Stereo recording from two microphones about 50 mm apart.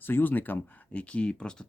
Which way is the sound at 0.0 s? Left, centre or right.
Left.